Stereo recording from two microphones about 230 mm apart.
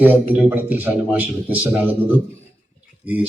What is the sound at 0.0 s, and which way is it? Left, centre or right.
A man's voice, centre.